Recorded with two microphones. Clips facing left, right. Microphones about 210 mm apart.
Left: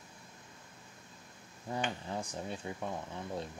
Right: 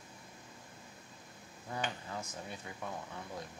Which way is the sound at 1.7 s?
30° left (ahead or behind).